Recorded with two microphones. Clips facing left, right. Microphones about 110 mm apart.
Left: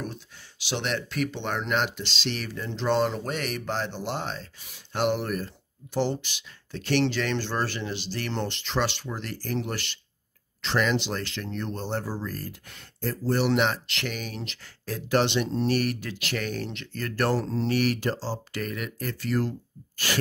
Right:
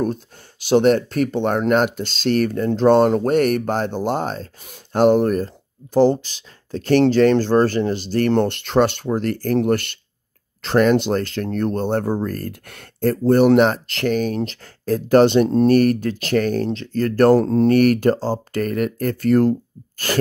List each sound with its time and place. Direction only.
0.0 s speech: 45° right (ahead or behind)